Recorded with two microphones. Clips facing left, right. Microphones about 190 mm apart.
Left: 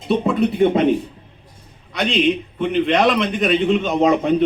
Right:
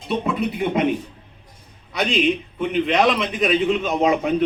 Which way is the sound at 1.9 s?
Centre (ahead or behind).